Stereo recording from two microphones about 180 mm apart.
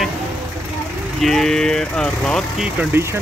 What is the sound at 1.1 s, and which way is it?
Speech, centre (ahead or behind).